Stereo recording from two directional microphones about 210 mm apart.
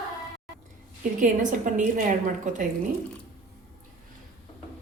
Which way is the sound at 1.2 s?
35° right (ahead or behind).